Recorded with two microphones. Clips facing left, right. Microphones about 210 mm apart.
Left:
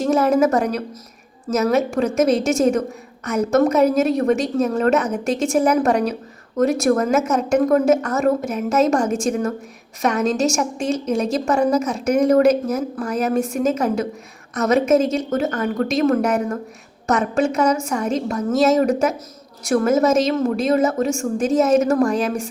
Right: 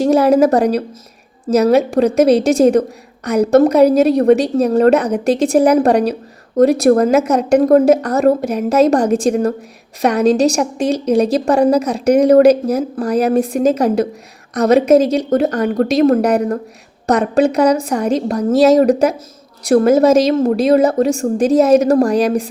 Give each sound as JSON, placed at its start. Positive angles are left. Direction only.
{"t": 0.0, "sound": "a woman's voice", "side_deg": -35}